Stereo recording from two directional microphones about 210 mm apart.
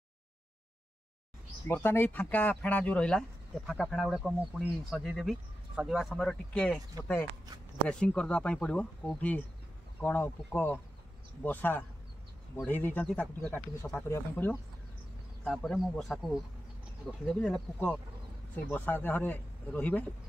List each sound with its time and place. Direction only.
1.7 s speech: 10° left (ahead or behind)
7.9 s speech: 5° left (ahead or behind)
17.3 s speech: 5° left (ahead or behind)